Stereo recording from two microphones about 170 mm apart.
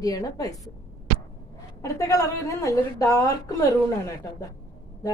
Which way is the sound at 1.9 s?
20° left (ahead or behind).